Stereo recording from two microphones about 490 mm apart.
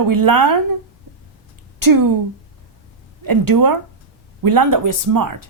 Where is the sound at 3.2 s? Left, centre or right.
Right.